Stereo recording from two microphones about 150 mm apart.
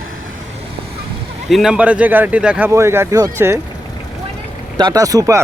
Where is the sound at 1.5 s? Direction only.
Centre (ahead or behind); by 3.6 s 20° right (ahead or behind).